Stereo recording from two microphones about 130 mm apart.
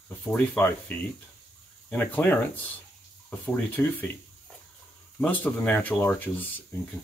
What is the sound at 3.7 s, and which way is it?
Speech, 15° left (ahead or behind).